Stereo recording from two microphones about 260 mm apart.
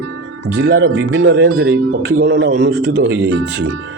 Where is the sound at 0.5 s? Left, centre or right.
Right.